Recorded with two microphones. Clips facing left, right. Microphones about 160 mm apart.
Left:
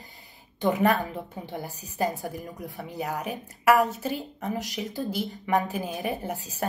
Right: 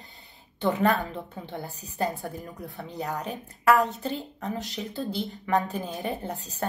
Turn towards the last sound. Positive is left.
turn(degrees=10)  # may be behind; listen again after turning